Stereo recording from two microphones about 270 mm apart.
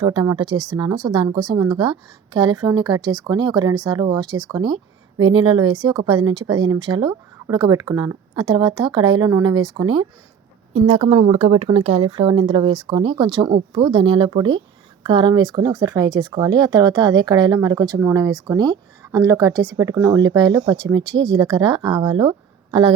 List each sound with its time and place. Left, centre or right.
0.0 s speech: centre